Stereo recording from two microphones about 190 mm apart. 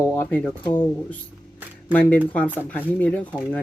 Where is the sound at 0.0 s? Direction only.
10° left (ahead or behind).